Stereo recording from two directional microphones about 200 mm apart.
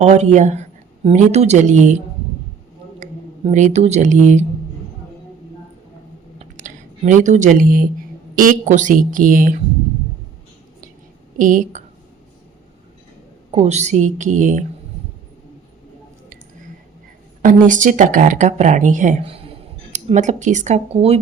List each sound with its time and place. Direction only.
0.0 s speech: 35° right (ahead or behind)
3.0 s speech: 35° right (ahead or behind)
6.4 s a sound: 40° right (ahead or behind)
8.4 s speech: 40° right (ahead or behind)
11.3 s speech: 40° right (ahead or behind)
13.5 s speech: 35° right (ahead or behind)
17.4 s speech: 40° right (ahead or behind)